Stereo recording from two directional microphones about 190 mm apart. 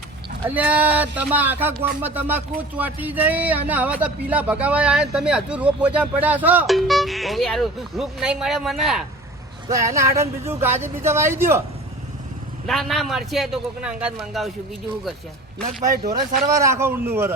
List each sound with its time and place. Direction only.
0.4 s speech: 10° right (ahead or behind)
9.6 s speech: 15° right (ahead or behind)
12.6 s a man's voice: centre (ahead or behind)
16.5 s speech: 15° right (ahead or behind)